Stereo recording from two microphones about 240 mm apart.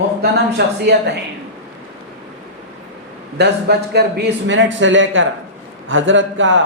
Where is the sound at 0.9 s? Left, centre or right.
Right.